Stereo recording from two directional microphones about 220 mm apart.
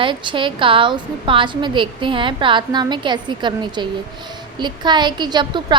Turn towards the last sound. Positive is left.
turn(degrees=-20)  # may be behind; listen again after turning